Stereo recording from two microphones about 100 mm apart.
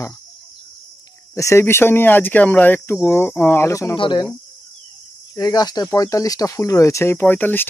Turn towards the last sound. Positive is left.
turn(degrees=20)  # may be behind; listen again after turning